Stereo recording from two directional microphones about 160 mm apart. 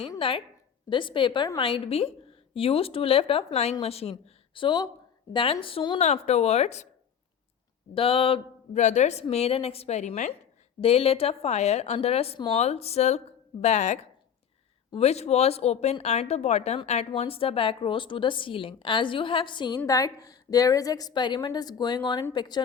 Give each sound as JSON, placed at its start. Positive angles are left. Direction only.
{"t": 0.2, "sound": "a woman's voice", "side_deg": 35}
{"t": 6.0, "sound": "speech", "side_deg": 45}
{"t": 7.9, "sound": "a woman's voice", "side_deg": 35}